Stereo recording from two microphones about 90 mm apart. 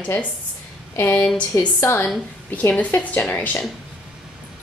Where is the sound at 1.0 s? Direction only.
15° left (ahead or behind).